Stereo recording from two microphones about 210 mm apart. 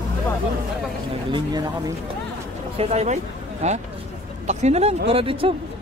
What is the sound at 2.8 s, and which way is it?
Speech, 30° right (ahead or behind).